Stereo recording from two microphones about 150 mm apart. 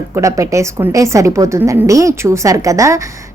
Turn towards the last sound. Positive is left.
turn(degrees=-20)  # may be behind; listen again after turning